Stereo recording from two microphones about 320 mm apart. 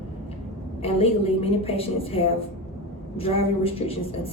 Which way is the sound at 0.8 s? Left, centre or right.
Centre.